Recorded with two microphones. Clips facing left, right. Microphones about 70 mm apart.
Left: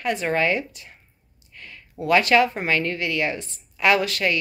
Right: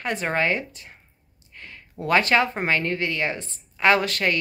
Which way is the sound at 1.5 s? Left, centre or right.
Right.